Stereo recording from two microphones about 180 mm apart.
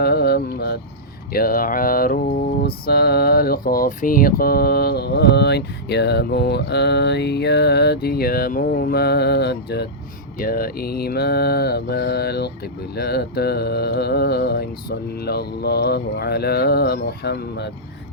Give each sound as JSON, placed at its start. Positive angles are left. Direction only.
{"t": 0.0, "sound": "mantra", "side_deg": 60}
{"t": 10.3, "sound": "mantra", "side_deg": 55}